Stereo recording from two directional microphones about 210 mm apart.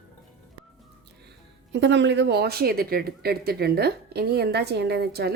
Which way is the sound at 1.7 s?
60° right (ahead or behind).